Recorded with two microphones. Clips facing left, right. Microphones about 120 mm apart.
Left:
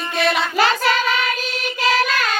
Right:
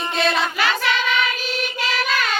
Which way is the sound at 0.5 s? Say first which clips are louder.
Left 4 dB; 40° left (ahead or behind).